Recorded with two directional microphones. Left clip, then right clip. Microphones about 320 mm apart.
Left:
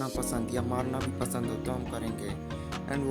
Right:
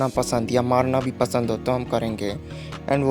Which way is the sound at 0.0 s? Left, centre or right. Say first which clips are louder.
Right 11 dB; left.